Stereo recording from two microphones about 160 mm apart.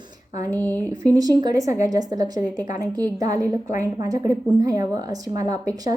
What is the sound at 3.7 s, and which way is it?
Speech, 55° left (ahead or behind).